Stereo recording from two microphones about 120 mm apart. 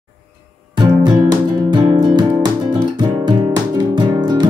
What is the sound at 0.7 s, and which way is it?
Music, 40° right (ahead or behind).